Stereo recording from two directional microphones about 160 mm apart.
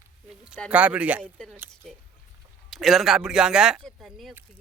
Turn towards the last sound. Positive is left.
turn(degrees=0)  # may be behind; listen again after turning